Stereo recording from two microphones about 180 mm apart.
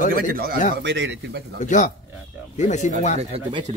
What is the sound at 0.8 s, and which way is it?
Speech, 80° right.